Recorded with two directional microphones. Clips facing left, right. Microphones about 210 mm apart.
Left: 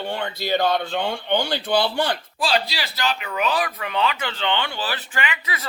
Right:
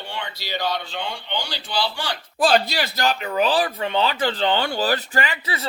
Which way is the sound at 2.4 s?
50° right (ahead or behind).